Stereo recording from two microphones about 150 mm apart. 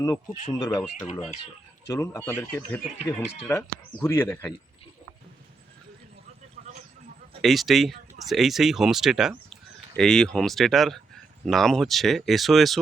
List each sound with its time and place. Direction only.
0.5 s speech: 25° left (ahead or behind)
1.9 s speech: 15° left (ahead or behind)
6.6 s a sound: 65° right (ahead or behind)
7.4 s speech: centre (ahead or behind)